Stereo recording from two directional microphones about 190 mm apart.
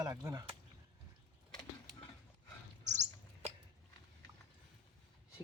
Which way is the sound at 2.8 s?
40° right (ahead or behind).